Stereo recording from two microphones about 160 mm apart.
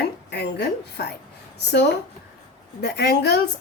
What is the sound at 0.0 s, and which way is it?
A woman's voice, 90° left.